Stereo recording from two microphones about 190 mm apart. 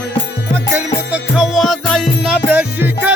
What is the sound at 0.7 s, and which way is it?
Music, 10° right (ahead or behind).